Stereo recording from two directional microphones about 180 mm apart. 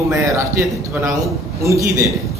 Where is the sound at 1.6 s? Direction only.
15° right (ahead or behind).